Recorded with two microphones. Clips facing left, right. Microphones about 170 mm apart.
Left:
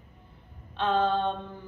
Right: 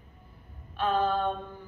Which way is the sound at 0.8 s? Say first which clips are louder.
Left 1 dB; 25° left (ahead or behind).